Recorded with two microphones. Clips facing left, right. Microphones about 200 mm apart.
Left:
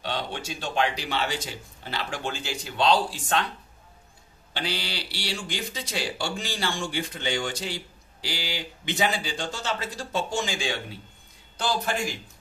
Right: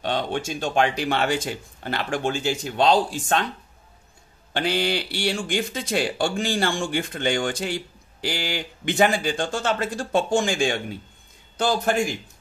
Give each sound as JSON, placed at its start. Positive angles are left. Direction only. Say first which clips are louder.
{"t": 0.0, "sound": "speech", "louder": "right 6 dB", "side_deg": -50}
{"t": 4.6, "sound": "speech", "louder": "right 9 dB", "side_deg": -50}